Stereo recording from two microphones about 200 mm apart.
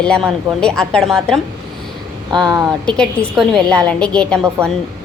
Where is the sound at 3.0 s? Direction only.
5° left (ahead or behind).